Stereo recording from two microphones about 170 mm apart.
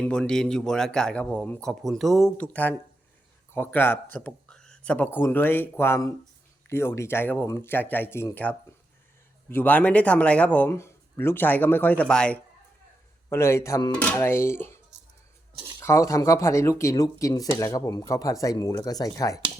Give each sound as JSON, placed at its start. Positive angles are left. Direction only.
{"t": 0.0, "sound": "speech", "side_deg": 5}
{"t": 13.3, "sound": "speech", "side_deg": 15}
{"t": 15.8, "sound": "speech", "side_deg": 15}